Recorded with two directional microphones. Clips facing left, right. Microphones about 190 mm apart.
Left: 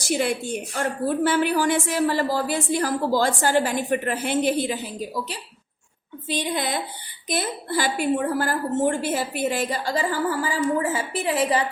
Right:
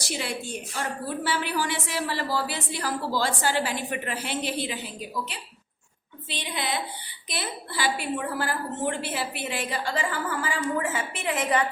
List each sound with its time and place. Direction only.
0.0 s a woman's voice: 50° left (ahead or behind); by 11.6 s 35° left (ahead or behind)